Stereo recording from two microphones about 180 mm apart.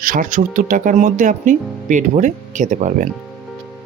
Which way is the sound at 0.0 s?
50° right (ahead or behind).